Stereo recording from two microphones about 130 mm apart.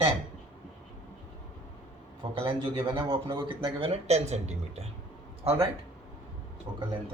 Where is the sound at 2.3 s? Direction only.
40° right (ahead or behind); by 4.9 s 55° right (ahead or behind).